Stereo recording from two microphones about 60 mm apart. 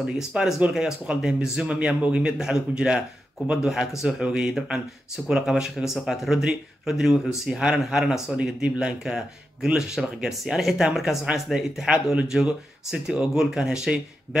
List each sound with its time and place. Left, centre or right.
0.0 s a man's voice: centre
8.4 s speech: centre